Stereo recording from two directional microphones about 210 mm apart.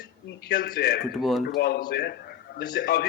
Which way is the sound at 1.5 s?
50° left (ahead or behind).